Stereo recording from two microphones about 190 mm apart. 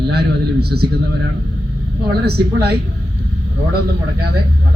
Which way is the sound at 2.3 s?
55° right (ahead or behind).